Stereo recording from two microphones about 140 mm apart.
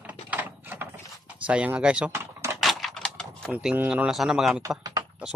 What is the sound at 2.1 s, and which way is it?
Typing, 20° right (ahead or behind).